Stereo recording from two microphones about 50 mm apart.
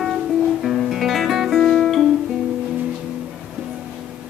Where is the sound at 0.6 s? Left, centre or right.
Centre.